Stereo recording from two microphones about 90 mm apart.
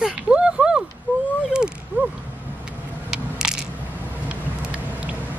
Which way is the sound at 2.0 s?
20° right (ahead or behind).